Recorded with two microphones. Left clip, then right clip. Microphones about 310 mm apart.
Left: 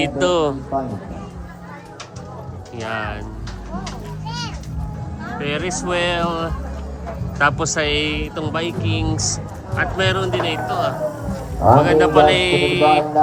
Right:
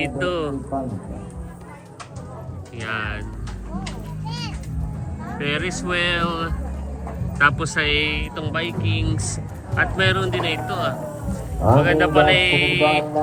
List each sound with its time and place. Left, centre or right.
0.0 s speech: centre
0.7 s speech: right
2.7 s speech: centre
4.3 s music: right
5.4 s speech: centre